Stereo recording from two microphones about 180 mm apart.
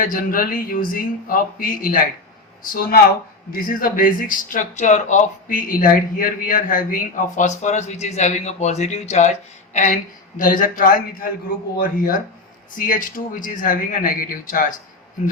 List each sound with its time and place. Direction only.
0.0 s speech: 50° left (ahead or behind)
3.5 s speech: 50° left (ahead or behind)